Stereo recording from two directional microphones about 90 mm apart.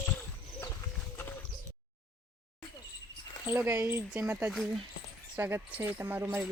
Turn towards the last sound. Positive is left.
turn(degrees=-20)  # may be behind; listen again after turning